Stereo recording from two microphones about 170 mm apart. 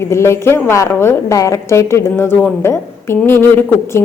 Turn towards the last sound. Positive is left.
turn(degrees=15)  # may be behind; listen again after turning